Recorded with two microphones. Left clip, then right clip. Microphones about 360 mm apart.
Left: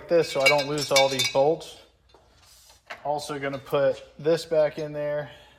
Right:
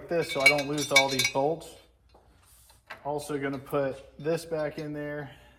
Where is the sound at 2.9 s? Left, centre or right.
Left.